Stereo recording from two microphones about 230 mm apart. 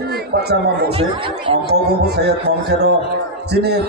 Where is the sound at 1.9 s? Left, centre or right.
Right.